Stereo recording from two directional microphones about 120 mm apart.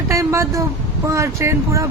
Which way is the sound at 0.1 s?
25° right (ahead or behind).